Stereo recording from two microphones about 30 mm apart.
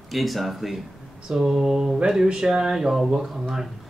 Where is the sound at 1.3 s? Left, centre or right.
Centre.